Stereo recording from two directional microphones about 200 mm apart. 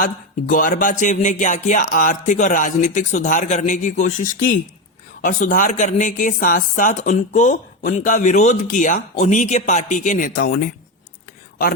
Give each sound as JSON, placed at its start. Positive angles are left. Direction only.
{"t": 0.0, "sound": "speech", "side_deg": 40}